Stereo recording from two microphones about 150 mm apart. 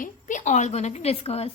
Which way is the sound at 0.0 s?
55° left (ahead or behind).